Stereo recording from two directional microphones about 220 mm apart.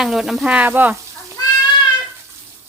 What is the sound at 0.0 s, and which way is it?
Speech, centre (ahead or behind).